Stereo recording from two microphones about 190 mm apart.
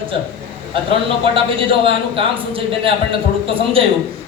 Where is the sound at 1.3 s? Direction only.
30° right (ahead or behind).